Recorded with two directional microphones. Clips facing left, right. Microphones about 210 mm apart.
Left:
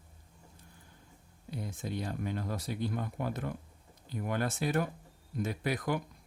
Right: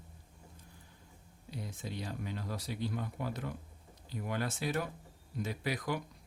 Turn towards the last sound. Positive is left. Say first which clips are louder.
# left 3 dB
turn(degrees=50)  # may be behind; listen again after turning